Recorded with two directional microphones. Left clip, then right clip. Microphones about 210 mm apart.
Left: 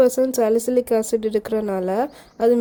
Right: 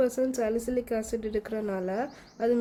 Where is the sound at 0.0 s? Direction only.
35° left (ahead or behind).